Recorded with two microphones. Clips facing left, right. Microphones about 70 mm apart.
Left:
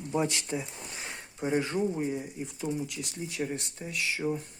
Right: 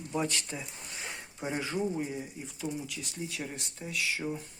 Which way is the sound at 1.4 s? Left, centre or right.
Centre.